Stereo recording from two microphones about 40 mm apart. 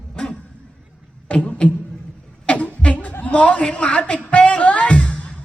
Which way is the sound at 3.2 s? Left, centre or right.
Left.